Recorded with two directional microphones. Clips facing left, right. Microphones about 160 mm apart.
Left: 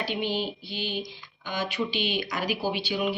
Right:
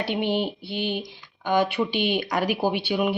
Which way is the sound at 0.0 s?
60° right (ahead or behind).